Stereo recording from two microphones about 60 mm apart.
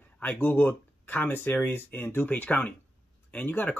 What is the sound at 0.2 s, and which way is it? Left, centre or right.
Speech, left.